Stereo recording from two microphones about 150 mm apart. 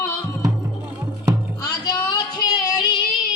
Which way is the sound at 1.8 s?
30° left (ahead or behind).